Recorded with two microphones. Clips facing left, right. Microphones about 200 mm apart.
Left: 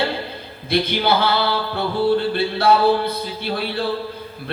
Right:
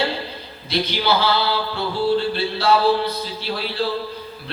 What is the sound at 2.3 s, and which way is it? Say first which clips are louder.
Speech: left 2 dB; 55° left (ahead or behind).